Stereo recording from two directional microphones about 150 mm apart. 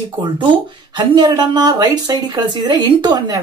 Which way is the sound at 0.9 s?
30° right (ahead or behind).